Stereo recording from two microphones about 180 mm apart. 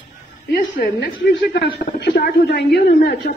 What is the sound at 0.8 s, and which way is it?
A woman's voice, 65° left (ahead or behind).